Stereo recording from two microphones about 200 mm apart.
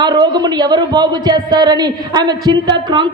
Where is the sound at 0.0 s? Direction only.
20° right (ahead or behind).